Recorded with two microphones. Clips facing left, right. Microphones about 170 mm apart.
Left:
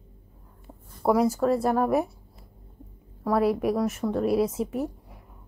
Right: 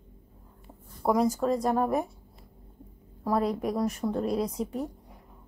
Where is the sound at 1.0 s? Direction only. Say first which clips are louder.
Left 3 dB; 5° left (ahead or behind).